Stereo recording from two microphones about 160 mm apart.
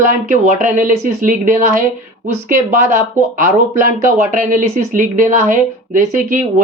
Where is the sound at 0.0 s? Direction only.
55° right (ahead or behind).